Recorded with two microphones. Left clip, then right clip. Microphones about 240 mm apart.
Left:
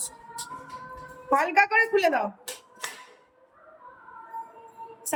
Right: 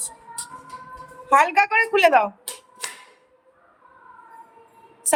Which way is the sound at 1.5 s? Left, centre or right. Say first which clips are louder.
Right 2 dB; centre.